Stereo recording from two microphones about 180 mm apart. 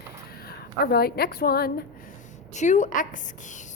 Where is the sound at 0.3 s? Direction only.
60° left (ahead or behind).